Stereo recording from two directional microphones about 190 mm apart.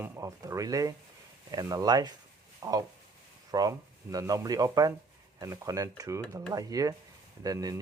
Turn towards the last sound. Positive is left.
turn(degrees=-20)  # may be behind; listen again after turning